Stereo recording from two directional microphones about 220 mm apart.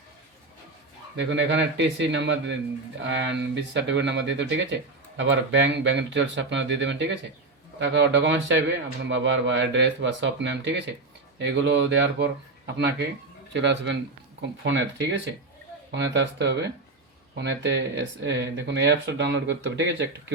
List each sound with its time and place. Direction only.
1.1 s speech: 55° right (ahead or behind)